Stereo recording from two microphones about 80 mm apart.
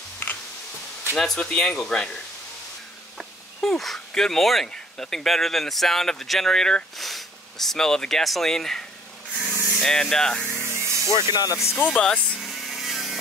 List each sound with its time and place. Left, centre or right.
0.2 s a sound: left
1.1 s speech: centre
3.2 s speech: centre
10.6 s spray: right
11.1 s speech: left
11.5 s speech: left
11.9 s vehicle: centre